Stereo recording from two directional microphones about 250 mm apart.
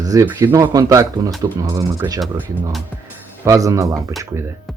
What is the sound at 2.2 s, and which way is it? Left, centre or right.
Speech, centre.